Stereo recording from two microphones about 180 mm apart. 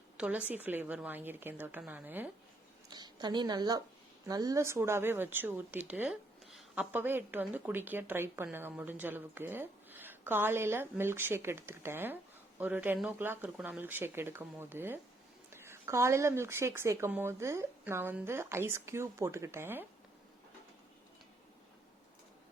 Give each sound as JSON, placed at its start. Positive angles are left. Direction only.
{"t": 0.2, "sound": "speech", "side_deg": -10}
{"t": 2.9, "sound": "a woman's voice", "side_deg": -25}